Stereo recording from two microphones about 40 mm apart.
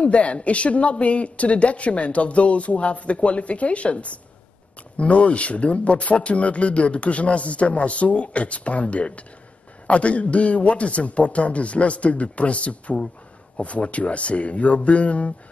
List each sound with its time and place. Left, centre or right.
0.0 s speech: left